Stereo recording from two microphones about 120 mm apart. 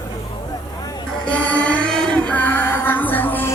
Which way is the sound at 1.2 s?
10° left (ahead or behind).